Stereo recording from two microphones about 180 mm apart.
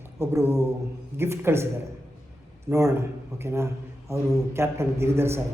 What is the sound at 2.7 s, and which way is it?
A man's voice, 15° right (ahead or behind).